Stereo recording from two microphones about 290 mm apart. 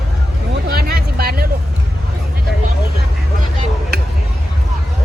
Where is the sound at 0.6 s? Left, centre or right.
Right.